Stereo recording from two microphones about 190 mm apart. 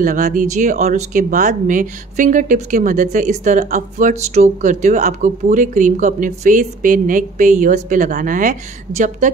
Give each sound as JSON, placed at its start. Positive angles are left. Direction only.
{"t": 0.0, "sound": "speech", "side_deg": -45}